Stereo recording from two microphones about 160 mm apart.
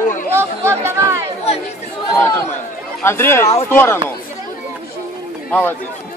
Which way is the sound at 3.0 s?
15° left (ahead or behind).